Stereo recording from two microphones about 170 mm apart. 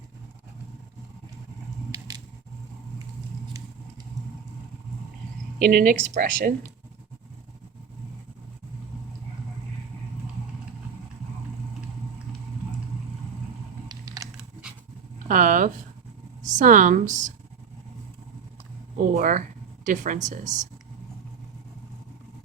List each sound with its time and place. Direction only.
1.9 s squish: 20° right (ahead or behind)
5.6 s speech: 55° right (ahead or behind)
13.8 s typing: 20° right (ahead or behind)
15.3 s speech: 50° right (ahead or behind)
19.1 s speech: 50° right (ahead or behind)